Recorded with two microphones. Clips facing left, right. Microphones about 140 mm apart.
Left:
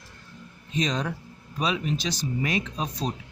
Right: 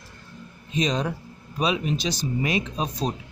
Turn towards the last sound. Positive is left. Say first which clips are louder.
# right 3 dB
turn(degrees=-15)  # may be behind; listen again after turning